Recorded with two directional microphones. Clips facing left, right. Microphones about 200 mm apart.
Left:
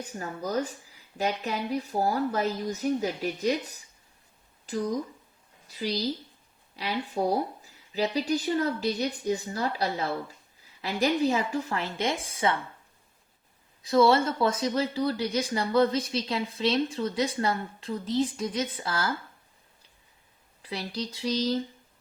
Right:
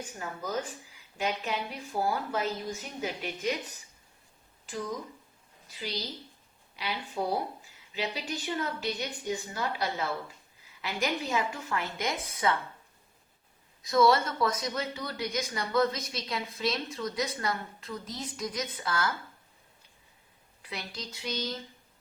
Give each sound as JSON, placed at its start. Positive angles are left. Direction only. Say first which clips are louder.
{"t": 0.2, "sound": "speech", "louder": "left 5 dB", "side_deg": 40}
{"t": 13.8, "sound": "speech", "louder": "left 3 dB", "side_deg": 30}
{"t": 20.6, "sound": "speech", "louder": "left 7 dB", "side_deg": 35}